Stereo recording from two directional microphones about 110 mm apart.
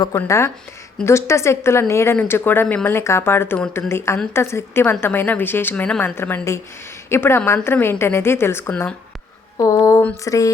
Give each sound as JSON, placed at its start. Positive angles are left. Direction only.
{"t": 0.1, "sound": "a woman's voice", "side_deg": 25}
{"t": 9.6, "sound": "a sound", "side_deg": 30}
{"t": 10.2, "sound": "speech", "side_deg": 30}